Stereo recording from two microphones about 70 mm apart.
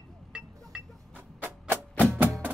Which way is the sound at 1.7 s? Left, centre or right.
Right.